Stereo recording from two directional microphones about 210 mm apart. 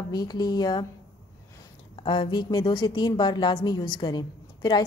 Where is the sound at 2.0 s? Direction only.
25° left (ahead or behind).